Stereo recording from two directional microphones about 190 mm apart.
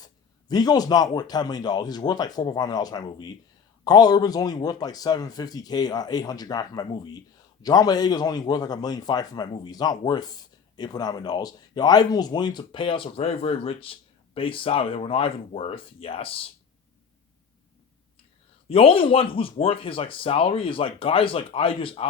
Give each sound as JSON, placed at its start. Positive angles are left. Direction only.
{"t": 0.0, "sound": "a man's voice", "side_deg": 20}
{"t": 18.7, "sound": "a man's voice", "side_deg": 30}